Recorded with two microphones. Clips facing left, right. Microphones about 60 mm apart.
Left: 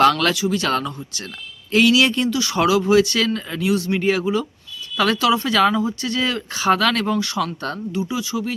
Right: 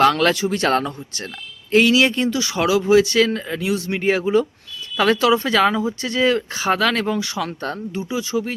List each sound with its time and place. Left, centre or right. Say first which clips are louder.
0.0 s speech: even; right
0.3 s speech: right 2 dB; right
2.6 s speech: even; centre
5.6 s speech: even; centre; by 8.5 s right